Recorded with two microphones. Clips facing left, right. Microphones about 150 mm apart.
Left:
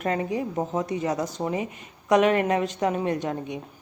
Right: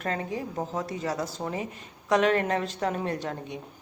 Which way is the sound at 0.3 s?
20° left (ahead or behind).